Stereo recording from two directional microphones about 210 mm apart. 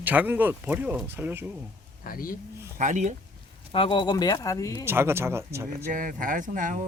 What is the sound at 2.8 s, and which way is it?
Speech, 35° right (ahead or behind).